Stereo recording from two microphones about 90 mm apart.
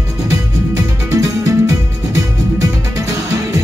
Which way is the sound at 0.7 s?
40° right (ahead or behind).